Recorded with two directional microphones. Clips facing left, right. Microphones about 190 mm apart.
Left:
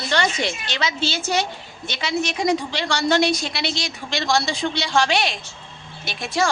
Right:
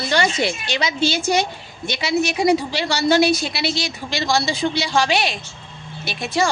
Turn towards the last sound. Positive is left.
turn(degrees=0)  # may be behind; listen again after turning